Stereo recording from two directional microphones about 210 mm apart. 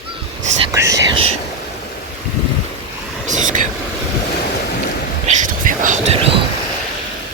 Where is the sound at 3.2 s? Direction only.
35° right (ahead or behind).